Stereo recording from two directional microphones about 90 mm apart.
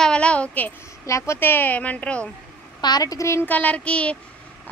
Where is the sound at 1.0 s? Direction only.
35° left (ahead or behind); by 2.2 s 15° left (ahead or behind).